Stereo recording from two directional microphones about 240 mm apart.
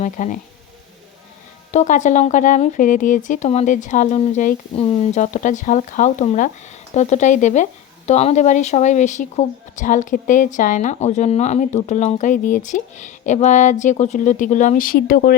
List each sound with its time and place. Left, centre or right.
0.0 s speech: left
1.7 s speech: left